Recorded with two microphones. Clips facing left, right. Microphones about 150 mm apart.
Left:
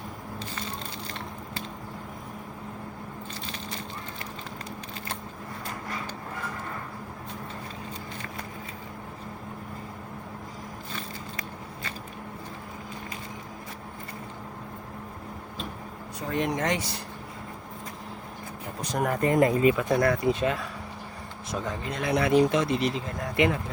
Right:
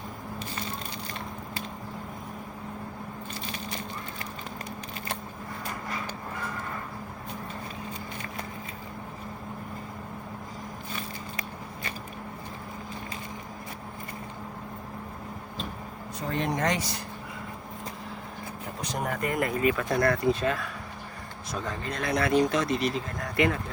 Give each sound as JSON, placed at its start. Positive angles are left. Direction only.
{"t": 16.3, "sound": "speech", "side_deg": 10}
{"t": 16.6, "sound": "speech", "side_deg": 25}
{"t": 18.8, "sound": "speech", "side_deg": 45}
{"t": 19.2, "sound": "speech", "side_deg": 25}
{"t": 19.7, "sound": "speech", "side_deg": 5}
{"t": 20.3, "sound": "speech", "side_deg": 20}